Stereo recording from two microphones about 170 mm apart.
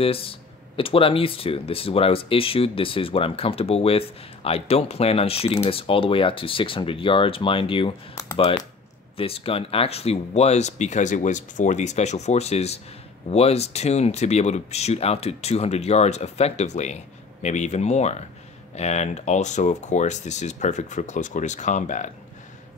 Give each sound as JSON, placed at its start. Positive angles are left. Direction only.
{"t": 0.0, "sound": "speech", "side_deg": 35}
{"t": 9.1, "sound": "speech", "side_deg": 35}